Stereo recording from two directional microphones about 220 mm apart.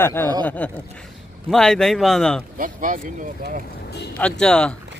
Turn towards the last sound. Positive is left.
turn(degrees=5)  # may be behind; listen again after turning